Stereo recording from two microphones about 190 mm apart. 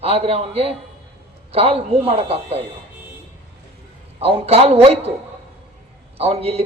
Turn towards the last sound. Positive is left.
turn(degrees=-30)  # may be behind; listen again after turning